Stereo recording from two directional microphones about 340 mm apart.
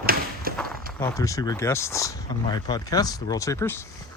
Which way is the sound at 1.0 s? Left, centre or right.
Centre.